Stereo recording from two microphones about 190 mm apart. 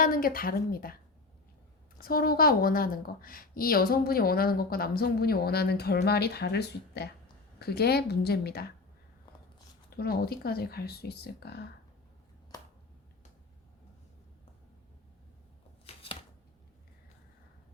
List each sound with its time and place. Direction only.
0.0 s a woman's voice: 50° left (ahead or behind)
2.0 s a woman's voice: 50° left (ahead or behind)
10.0 s speech: 55° left (ahead or behind)